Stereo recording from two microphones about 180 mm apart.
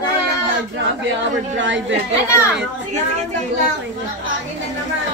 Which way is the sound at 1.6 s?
90° right.